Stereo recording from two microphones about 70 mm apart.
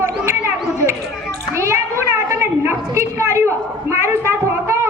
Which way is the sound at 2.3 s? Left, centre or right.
Right.